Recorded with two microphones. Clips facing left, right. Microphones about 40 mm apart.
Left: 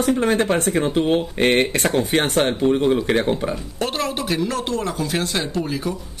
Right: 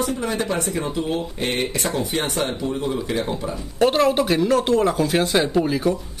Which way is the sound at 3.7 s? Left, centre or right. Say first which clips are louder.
Right 11 dB; centre.